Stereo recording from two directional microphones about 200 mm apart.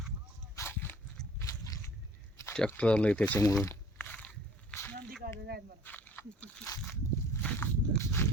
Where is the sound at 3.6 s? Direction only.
10° left (ahead or behind).